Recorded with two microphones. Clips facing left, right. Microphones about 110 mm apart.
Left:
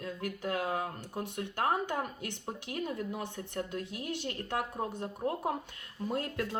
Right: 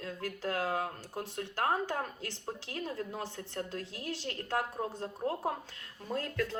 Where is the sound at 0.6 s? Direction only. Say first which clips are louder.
Even; 20° left (ahead or behind).